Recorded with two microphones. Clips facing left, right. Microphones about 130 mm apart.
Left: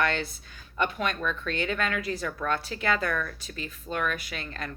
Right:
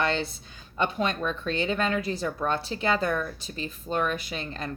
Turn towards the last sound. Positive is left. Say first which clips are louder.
# right 3 dB
turn(degrees=-25)  # may be behind; listen again after turning